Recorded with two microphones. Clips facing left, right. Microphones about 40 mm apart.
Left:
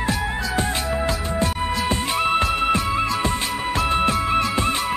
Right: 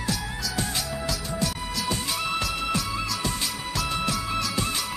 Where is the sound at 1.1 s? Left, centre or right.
Left.